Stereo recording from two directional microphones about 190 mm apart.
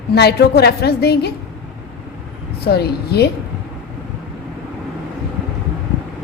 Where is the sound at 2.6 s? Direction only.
55° left (ahead or behind).